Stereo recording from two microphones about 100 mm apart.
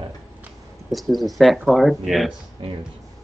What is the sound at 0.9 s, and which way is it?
Speech, centre (ahead or behind).